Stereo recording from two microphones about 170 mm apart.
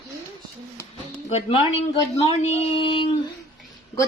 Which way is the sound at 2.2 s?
35° left (ahead or behind).